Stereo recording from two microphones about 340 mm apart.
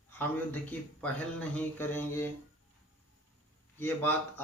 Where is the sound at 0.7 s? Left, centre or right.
Centre.